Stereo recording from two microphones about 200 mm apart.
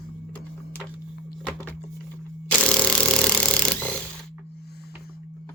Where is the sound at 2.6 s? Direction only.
5° left (ahead or behind).